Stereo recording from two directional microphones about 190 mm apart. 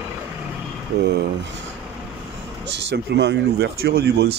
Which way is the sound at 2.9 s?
65° right (ahead or behind).